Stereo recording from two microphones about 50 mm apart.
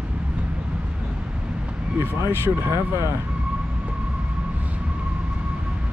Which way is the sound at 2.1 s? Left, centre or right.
Right.